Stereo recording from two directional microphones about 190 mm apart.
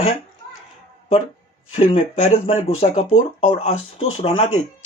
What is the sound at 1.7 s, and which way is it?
Speech, 30° left (ahead or behind).